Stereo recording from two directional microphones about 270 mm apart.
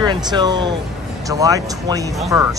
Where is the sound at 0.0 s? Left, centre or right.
Centre.